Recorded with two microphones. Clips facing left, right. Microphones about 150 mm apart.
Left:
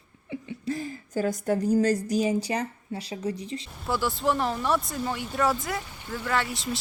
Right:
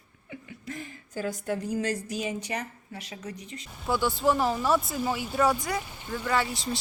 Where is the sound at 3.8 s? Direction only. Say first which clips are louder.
Right 1 dB; centre (ahead or behind).